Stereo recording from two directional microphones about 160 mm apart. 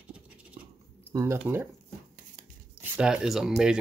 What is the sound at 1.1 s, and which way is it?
Speech, 15° right (ahead or behind).